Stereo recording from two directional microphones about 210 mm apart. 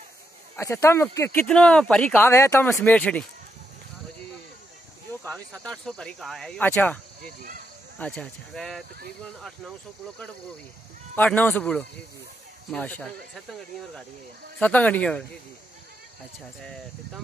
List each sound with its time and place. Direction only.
0.6 s speech: 15° left (ahead or behind)
5.2 s speech: centre (ahead or behind)
7.2 s speech: 40° right (ahead or behind)
8.0 s speech: 5° left (ahead or behind)
16.6 s speech: centre (ahead or behind)